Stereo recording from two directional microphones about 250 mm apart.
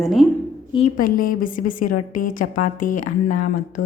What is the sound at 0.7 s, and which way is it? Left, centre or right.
A woman's voice, left.